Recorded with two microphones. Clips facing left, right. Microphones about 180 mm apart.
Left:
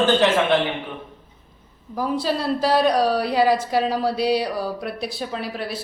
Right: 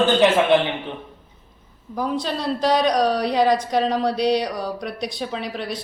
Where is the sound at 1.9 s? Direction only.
5° left (ahead or behind).